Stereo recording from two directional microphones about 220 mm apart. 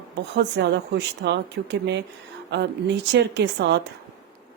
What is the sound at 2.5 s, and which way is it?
Speech, 50° right (ahead or behind).